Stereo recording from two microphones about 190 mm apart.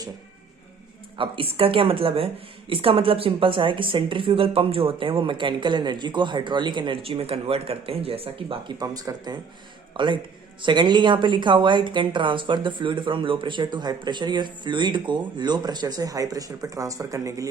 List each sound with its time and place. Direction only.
1.2 s a woman's voice: 30° right (ahead or behind)